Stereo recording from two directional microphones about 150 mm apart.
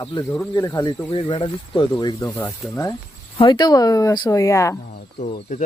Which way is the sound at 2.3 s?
15° left (ahead or behind).